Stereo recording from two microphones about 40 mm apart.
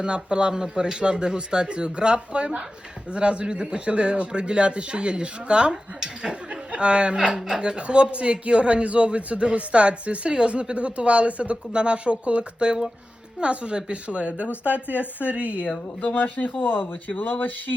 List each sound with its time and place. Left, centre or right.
0.0 s a man's voice: right
7.3 s speech: centre
7.6 s a man's voice: right
16.1 s speech: left